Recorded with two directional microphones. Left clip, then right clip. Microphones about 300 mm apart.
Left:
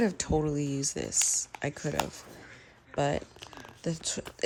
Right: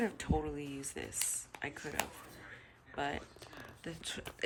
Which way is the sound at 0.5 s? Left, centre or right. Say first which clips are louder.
Left 11 dB; centre.